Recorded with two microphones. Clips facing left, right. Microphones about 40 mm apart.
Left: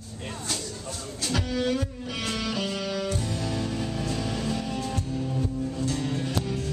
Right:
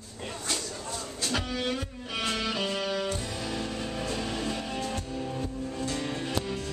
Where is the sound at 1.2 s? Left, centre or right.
Centre.